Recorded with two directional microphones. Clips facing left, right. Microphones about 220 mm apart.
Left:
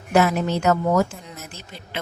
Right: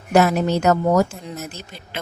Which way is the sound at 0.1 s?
40° right (ahead or behind).